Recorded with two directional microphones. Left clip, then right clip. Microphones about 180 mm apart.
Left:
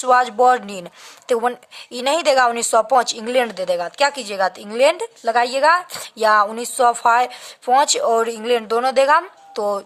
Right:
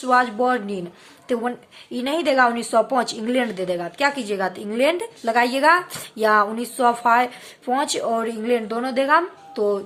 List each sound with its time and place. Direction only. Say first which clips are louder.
0.0 s a woman's voice: left 4 dB; 45° left (ahead or behind)